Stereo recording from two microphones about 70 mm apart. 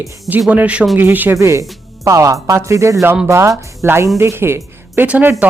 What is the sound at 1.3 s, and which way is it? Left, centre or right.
A woman's voice, right.